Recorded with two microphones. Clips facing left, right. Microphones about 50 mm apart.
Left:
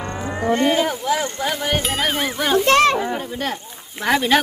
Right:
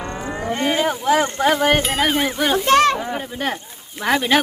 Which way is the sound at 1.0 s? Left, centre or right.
Right.